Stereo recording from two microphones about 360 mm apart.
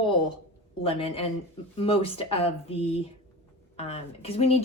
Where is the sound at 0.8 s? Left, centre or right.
Centre.